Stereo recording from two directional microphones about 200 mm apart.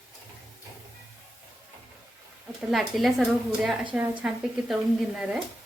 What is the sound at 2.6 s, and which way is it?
A woman's voice, centre (ahead or behind).